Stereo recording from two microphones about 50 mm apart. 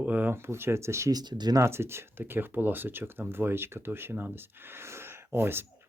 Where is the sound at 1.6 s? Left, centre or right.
Right.